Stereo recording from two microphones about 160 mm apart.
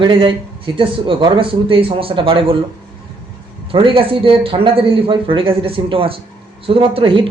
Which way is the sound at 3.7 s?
35° right (ahead or behind).